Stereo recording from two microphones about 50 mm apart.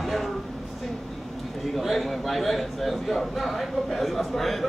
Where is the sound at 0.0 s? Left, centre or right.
Centre.